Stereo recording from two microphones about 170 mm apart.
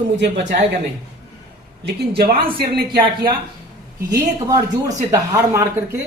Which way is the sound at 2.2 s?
65° right (ahead or behind).